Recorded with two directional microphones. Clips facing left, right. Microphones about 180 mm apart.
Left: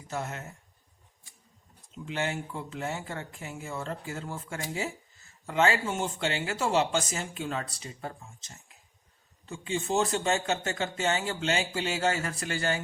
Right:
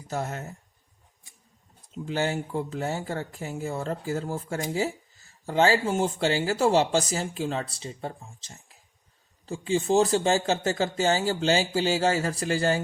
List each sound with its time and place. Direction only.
0.1 s speech: 40° right (ahead or behind)
2.0 s speech: 35° right (ahead or behind)